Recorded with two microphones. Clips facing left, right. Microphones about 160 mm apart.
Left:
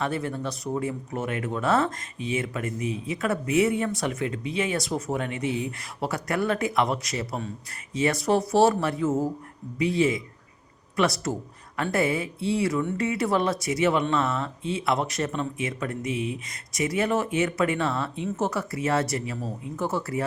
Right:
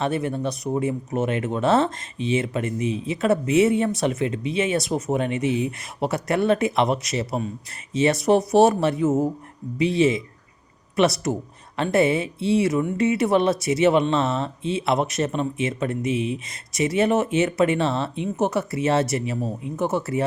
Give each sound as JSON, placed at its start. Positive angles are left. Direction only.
{"t": 0.0, "sound": "speech", "side_deg": -20}